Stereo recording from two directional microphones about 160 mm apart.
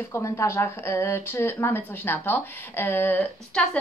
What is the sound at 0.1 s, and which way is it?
Speech, 15° left (ahead or behind).